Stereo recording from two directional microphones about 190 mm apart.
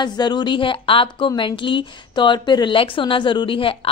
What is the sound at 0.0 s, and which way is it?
A woman's voice, 25° left (ahead or behind).